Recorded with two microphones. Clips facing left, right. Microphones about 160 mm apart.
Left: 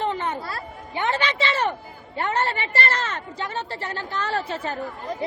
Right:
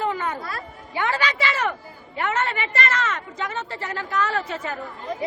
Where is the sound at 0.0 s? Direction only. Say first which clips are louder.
Even; 25° left (ahead or behind).